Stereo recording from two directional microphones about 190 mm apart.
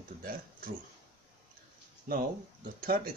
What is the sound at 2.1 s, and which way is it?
Speech, 55° right (ahead or behind).